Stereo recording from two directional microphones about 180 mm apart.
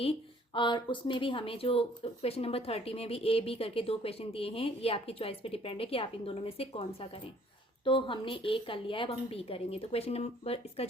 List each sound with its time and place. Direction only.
0.5 s speech: 25° left (ahead or behind)